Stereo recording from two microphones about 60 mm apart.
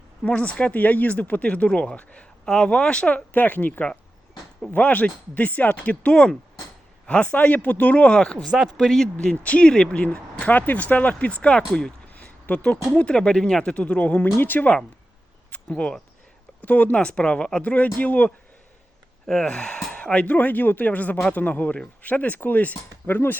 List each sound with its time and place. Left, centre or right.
0.2 s speech: centre
2.5 s speech: centre
3.3 s speech: left
8.8 s speech: centre
9.1 s speech: left
15.5 s speech: centre
19.3 s speech: centre; by 23.4 s left